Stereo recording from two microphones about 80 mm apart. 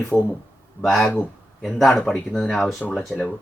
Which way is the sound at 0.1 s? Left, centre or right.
Left.